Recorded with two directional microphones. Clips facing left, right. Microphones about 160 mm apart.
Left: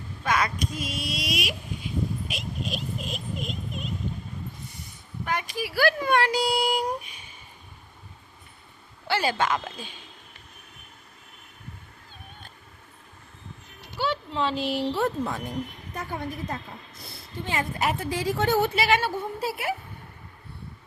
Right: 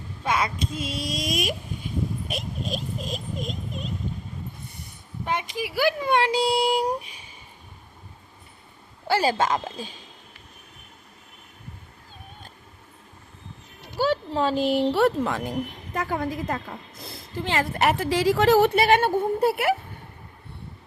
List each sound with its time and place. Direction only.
0.3 s speech: 25° right (ahead or behind)
5.2 s speech: 20° right (ahead or behind)
9.0 s speech: 35° right (ahead or behind)
13.9 s a sound: 40° right (ahead or behind)
14.9 s a woman's voice: 85° right
18.8 s a woman's voice: 55° right (ahead or behind)